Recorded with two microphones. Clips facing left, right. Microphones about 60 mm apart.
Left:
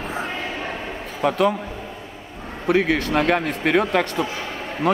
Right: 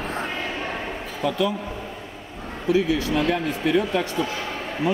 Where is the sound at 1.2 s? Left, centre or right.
Left.